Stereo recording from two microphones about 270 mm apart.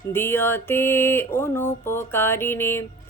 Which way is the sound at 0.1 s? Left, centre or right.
Centre.